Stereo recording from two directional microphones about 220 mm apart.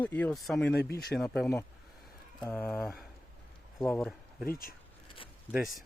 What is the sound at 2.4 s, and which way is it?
Speech, 5° left (ahead or behind).